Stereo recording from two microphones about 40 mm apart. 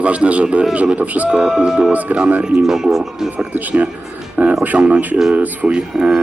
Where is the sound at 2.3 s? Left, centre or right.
Right.